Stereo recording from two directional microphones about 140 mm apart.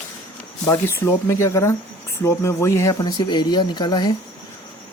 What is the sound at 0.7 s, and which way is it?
Speech, 20° left (ahead or behind).